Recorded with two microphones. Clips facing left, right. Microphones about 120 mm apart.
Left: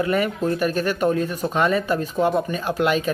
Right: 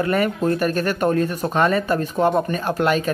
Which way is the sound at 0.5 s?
45° right (ahead or behind).